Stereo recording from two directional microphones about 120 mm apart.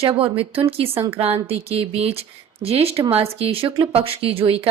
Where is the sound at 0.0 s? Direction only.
50° right (ahead or behind).